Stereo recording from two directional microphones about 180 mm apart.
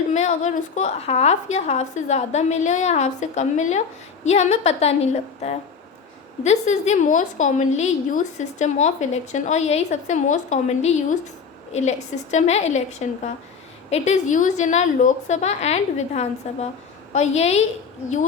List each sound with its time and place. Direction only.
0.1 s a woman's voice: 40° left (ahead or behind)
6.4 s a woman's voice: 40° left (ahead or behind)